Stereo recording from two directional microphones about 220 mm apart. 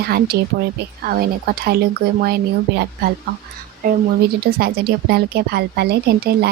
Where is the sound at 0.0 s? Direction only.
45° right (ahead or behind).